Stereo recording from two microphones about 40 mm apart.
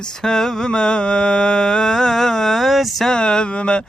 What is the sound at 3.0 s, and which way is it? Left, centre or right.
Speech, centre.